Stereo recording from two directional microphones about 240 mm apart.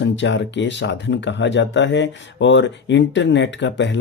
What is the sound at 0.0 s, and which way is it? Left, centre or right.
Speech, left.